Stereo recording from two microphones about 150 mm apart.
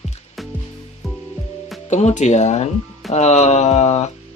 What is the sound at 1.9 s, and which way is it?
Speech, 50° left (ahead or behind).